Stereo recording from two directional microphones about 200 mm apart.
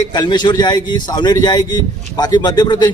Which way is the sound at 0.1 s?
20° left (ahead or behind).